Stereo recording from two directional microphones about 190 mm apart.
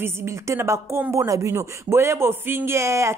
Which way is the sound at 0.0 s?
15° right (ahead or behind).